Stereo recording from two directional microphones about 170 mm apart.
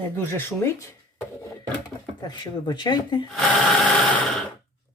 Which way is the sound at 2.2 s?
25° left (ahead or behind).